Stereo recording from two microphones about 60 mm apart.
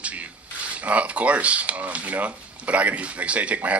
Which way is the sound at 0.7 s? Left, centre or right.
Right.